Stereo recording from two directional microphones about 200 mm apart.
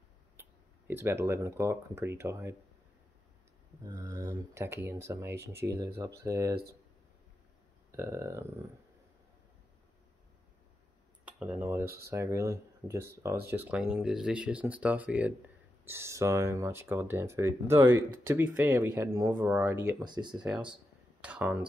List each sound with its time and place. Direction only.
0.4 s speech: 10° right (ahead or behind)
3.8 s speech: 20° right (ahead or behind)
7.9 s speech: 15° right (ahead or behind)
11.2 s speech: 5° right (ahead or behind)
20.3 s speech: 5° right (ahead or behind)